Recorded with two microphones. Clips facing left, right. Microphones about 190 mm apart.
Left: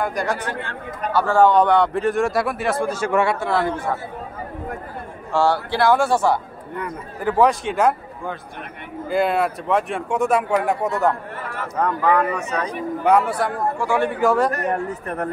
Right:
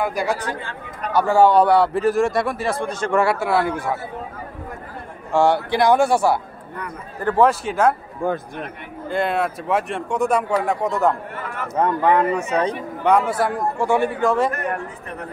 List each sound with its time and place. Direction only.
0.0 s a man's voice: 5° right (ahead or behind)
0.4 s speech: 60° left (ahead or behind)
1.1 s a man's voice: 10° right (ahead or behind)
5.3 s speech: 15° right (ahead or behind)
7.2 s a man's voice: centre (ahead or behind)
8.2 s a man's voice: 45° right (ahead or behind)
9.1 s a man's voice: centre (ahead or behind)
11.7 s speech: 25° right (ahead or behind)
13.0 s a man's voice: 5° left (ahead or behind)
14.5 s a man's voice: 35° left (ahead or behind)